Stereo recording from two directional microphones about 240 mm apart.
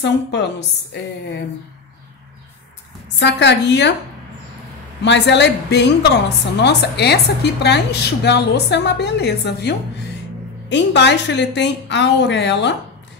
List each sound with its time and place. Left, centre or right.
0.0 s a woman's voice: left
3.2 s a woman's voice: left
5.0 s a woman's voice: left